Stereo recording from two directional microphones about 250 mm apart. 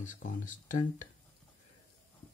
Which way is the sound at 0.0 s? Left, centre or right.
Left.